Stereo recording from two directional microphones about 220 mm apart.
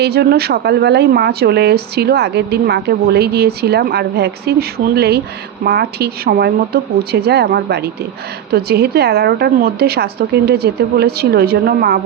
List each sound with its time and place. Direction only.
0.0 s a woman's voice: 45° right (ahead or behind)